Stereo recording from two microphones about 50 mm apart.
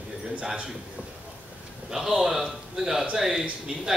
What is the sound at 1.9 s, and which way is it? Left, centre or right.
A man's voice, centre.